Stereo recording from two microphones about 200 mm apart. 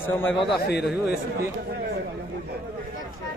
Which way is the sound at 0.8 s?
5° right (ahead or behind).